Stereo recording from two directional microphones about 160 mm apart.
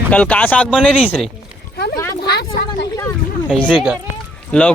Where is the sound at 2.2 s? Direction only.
80° left.